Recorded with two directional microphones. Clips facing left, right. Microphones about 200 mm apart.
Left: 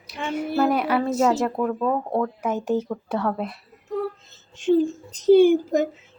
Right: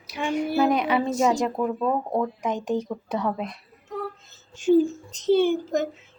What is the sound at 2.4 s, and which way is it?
Speech, 5° left (ahead or behind).